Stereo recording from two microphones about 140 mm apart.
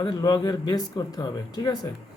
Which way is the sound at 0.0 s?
30° left (ahead or behind).